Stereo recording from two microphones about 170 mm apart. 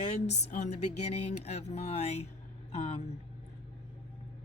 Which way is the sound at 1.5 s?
40° left (ahead or behind).